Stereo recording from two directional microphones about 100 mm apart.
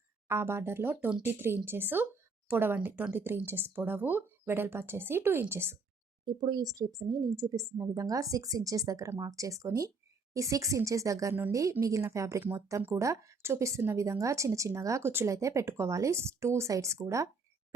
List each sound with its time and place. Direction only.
0.3 s speech: 25° right (ahead or behind)
6.2 s speech: 45° right (ahead or behind)